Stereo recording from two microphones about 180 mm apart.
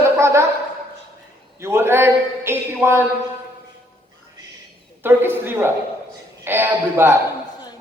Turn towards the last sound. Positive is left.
turn(degrees=-10)  # may be behind; listen again after turning